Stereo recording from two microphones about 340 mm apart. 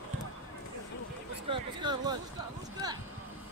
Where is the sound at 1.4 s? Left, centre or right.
Centre.